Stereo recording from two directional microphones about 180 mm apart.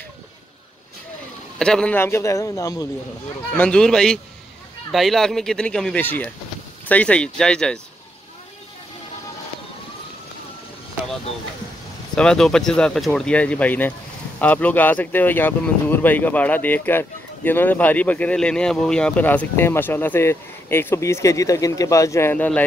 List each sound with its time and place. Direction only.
1.6 s speech: 5° left (ahead or behind)
3.5 s speech: 5° left (ahead or behind)
12.2 s speech: 5° left (ahead or behind)